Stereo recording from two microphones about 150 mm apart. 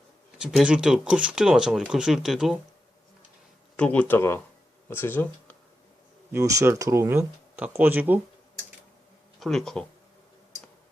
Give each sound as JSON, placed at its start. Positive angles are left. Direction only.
{"t": 0.3, "sound": "speech", "side_deg": -5}
{"t": 3.8, "sound": "speech", "side_deg": 10}
{"t": 6.3, "sound": "speech", "side_deg": -20}
{"t": 9.4, "sound": "speech", "side_deg": 0}